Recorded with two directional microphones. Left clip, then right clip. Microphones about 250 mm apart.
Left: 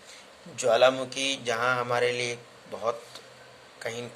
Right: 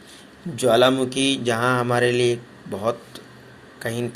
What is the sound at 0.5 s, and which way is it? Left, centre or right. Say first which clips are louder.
Mantra: right 4 dB; right.